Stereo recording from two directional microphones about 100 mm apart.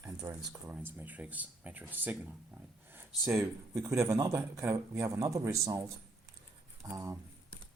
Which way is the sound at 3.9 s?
30° right (ahead or behind).